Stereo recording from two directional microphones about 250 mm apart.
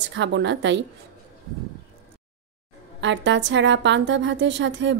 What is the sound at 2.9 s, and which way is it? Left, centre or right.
A woman's voice, right.